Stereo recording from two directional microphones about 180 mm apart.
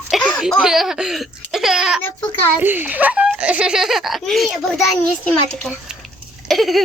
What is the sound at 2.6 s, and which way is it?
A child's voice, 10° right (ahead or behind).